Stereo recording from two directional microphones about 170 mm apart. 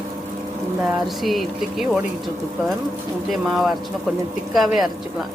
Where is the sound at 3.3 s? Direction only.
Centre (ahead or behind).